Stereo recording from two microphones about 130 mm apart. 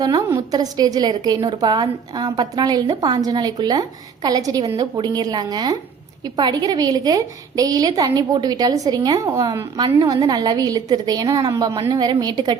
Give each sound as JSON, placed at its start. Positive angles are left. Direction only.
{"t": 0.0, "sound": "a woman's voice", "side_deg": -30}